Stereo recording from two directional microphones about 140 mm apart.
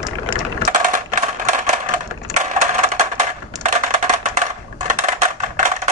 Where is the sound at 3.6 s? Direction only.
60° right (ahead or behind).